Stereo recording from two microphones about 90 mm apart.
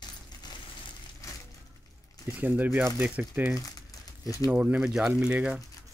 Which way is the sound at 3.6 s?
40° left (ahead or behind).